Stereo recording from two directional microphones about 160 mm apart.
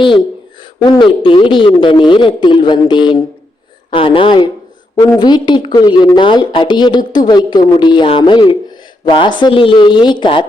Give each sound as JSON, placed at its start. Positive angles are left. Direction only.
{"t": 0.8, "sound": "a woman's voice", "side_deg": 30}